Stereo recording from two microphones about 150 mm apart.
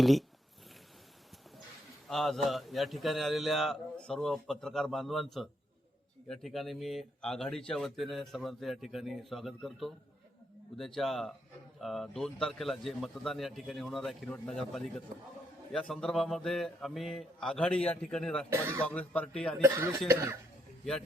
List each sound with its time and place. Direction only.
0.0 s speech: centre (ahead or behind)
2.0 s a man's voice: centre (ahead or behind)
19.6 s speech: 15° right (ahead or behind)